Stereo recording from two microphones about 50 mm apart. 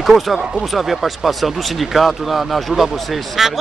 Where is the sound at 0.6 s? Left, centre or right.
Centre.